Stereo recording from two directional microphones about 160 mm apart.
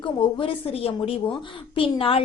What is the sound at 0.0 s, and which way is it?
A woman's voice, 30° left (ahead or behind).